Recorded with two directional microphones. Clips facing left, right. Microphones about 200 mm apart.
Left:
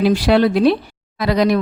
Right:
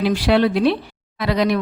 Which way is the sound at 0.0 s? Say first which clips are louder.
Left 3 dB; 40° left (ahead or behind).